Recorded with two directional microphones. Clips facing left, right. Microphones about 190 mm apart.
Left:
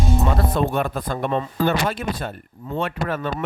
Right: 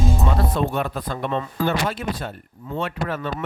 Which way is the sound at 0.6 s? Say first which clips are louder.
Left 2 dB; 50° left (ahead or behind).